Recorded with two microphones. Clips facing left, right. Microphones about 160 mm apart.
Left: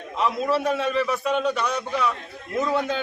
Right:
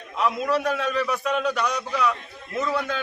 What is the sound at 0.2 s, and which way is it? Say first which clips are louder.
A man's voice: even; centre (ahead or behind).